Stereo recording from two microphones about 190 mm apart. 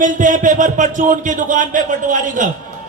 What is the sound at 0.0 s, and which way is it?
A man's voice, 45° right (ahead or behind).